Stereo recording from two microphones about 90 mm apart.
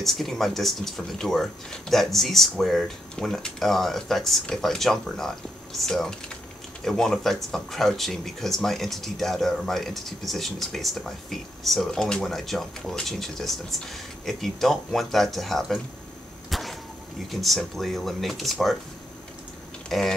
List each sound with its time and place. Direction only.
0.0 s speech: centre (ahead or behind)
16.4 s vehicle: centre (ahead or behind)
17.3 s speech: centre (ahead or behind)
19.9 s speech: centre (ahead or behind)